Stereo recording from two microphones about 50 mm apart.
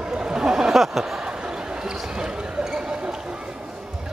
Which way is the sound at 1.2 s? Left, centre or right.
Centre.